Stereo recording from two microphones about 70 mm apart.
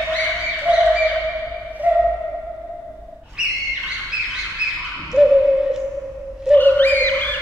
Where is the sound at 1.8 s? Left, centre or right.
Right.